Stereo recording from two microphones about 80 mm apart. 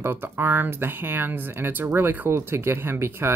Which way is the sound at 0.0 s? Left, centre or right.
Right.